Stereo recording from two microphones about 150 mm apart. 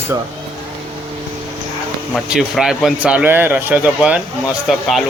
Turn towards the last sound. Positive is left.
turn(degrees=-5)  # may be behind; listen again after turning